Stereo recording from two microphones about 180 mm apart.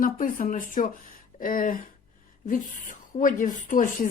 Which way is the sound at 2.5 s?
45° left (ahead or behind).